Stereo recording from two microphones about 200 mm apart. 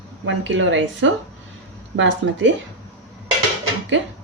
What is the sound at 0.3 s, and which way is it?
A woman's voice, 65° right (ahead or behind).